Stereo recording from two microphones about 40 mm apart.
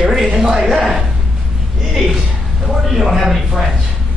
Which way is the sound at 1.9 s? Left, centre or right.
Centre.